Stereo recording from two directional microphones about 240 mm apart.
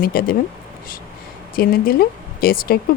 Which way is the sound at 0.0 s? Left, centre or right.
Left.